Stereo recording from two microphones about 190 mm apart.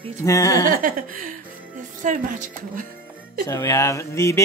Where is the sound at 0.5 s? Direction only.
45° right (ahead or behind).